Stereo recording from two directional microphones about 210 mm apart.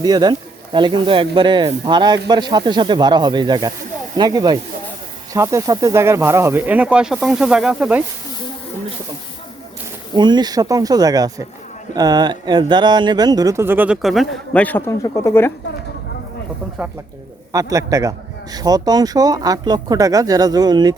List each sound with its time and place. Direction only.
0.0 s speech: 20° right (ahead or behind)
10.2 s speech: 20° right (ahead or behind); by 15.5 s 10° left (ahead or behind)
17.5 s speech: 15° right (ahead or behind)